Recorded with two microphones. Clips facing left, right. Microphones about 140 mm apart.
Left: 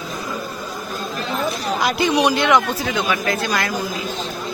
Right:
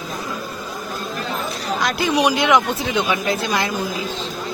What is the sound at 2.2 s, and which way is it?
Speech, 10° right (ahead or behind).